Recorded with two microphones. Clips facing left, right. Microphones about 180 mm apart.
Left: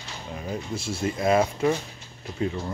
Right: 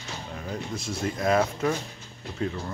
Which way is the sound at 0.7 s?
30° left (ahead or behind).